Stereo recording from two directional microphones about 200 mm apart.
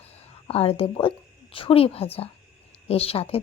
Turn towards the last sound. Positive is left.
turn(degrees=30)  # may be behind; listen again after turning